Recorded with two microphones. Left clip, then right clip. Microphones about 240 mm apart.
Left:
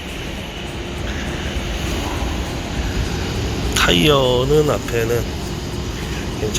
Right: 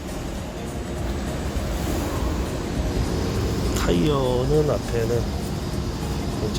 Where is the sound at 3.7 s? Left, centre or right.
Centre.